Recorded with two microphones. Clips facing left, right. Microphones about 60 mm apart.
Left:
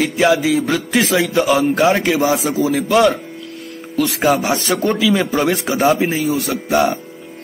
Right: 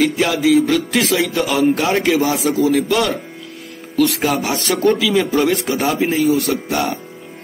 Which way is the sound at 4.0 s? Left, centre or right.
Centre.